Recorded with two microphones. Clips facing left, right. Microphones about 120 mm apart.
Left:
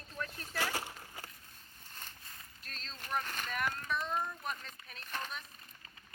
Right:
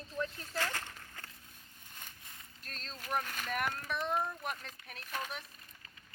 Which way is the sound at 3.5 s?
60° right (ahead or behind).